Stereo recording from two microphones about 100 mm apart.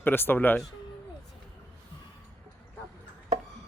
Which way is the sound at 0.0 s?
20° left (ahead or behind).